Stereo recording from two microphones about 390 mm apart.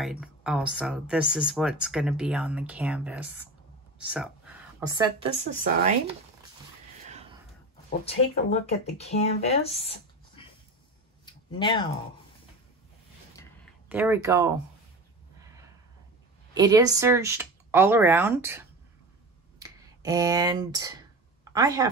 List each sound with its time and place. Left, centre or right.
0.0 s a woman's voice: centre
8.0 s speech: centre
11.2 s a sound: centre
13.8 s speech: centre
16.5 s speech: centre
19.6 s speech: centre